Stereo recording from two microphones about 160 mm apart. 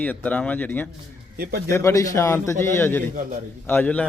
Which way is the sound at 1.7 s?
15° left (ahead or behind).